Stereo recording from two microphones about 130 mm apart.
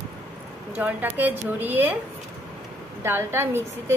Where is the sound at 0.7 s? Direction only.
10° right (ahead or behind).